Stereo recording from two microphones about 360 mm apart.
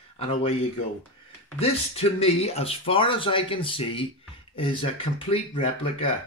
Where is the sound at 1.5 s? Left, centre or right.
Centre.